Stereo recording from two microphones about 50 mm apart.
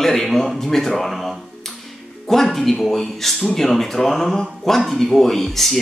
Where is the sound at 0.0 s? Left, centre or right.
Centre.